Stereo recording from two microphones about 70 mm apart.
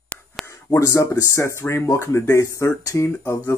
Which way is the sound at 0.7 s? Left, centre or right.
Left.